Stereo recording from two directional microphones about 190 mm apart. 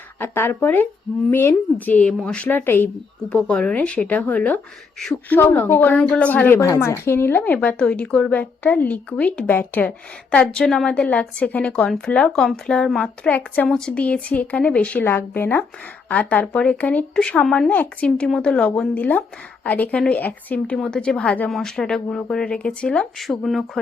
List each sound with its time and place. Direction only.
0.2 s a woman's voice: 10° left (ahead or behind)